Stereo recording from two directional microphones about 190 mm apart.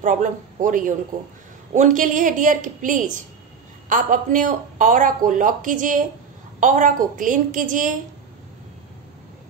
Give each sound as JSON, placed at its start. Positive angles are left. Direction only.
{"t": 0.0, "sound": "speech", "side_deg": -40}